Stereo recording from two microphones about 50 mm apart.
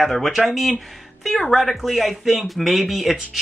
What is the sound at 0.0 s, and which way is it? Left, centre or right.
Speech, centre.